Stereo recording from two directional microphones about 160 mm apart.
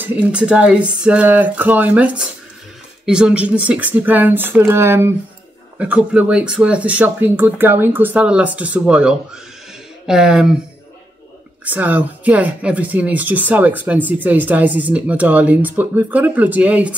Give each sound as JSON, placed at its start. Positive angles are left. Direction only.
{"t": 0.0, "sound": "speech", "side_deg": -5}
{"t": 11.6, "sound": "speech", "side_deg": -10}